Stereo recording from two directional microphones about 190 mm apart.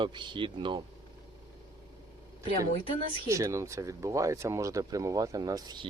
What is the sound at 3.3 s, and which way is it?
Speech, 15° right (ahead or behind).